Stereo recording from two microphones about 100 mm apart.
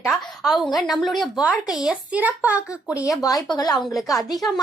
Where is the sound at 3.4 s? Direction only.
40° left (ahead or behind).